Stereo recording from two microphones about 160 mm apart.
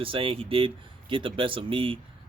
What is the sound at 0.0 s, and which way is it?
Speech, 35° right (ahead or behind).